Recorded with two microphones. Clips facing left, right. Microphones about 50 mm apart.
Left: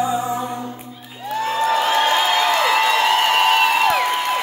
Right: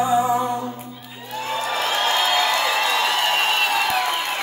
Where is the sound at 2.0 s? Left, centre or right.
Left.